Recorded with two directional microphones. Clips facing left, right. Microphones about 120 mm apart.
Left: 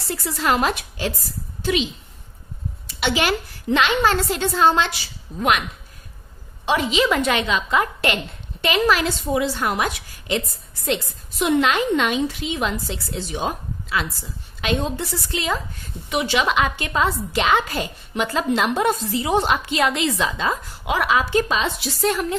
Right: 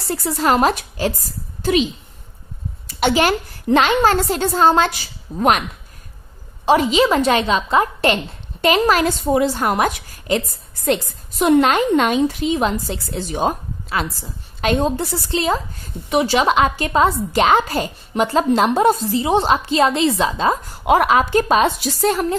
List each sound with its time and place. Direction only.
0.1 s a woman's voice: 40° right (ahead or behind)
3.0 s a woman's voice: 40° right (ahead or behind)
6.6 s a woman's voice: 40° right (ahead or behind)